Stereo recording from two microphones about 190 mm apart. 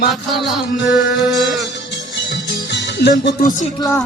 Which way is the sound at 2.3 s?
65° left (ahead or behind).